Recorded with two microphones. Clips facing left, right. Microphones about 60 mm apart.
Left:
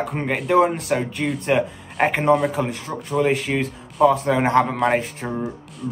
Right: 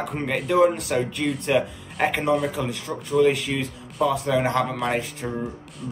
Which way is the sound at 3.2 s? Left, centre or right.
Left.